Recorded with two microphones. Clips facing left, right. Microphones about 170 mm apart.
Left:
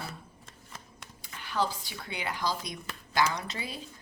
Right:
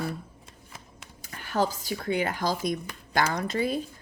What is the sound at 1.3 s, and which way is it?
Speech, 45° right (ahead or behind).